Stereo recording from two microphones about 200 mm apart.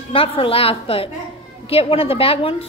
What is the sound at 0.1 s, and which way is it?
A woman's voice, 25° left (ahead or behind).